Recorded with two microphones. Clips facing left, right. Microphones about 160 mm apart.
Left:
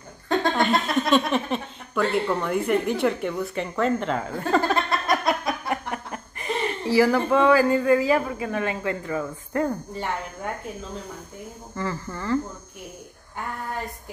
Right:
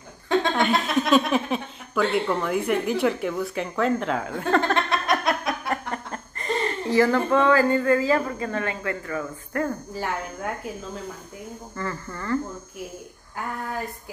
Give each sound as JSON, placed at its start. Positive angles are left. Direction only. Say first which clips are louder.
{"t": 0.3, "sound": "speech", "louder": "even", "side_deg": 0}
{"t": 9.9, "sound": "speech", "louder": "right 1 dB", "side_deg": -5}
{"t": 11.7, "sound": "speech", "louder": "left 3 dB", "side_deg": 10}